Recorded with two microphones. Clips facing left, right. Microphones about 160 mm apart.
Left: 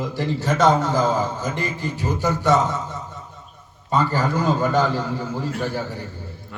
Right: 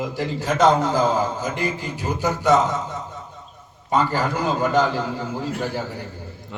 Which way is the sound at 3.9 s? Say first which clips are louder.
Even; 10° right (ahead or behind).